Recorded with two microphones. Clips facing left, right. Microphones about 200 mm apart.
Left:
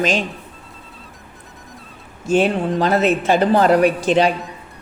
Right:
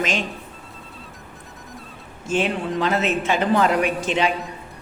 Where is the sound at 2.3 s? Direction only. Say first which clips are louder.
Left 6 dB; 40° left (ahead or behind).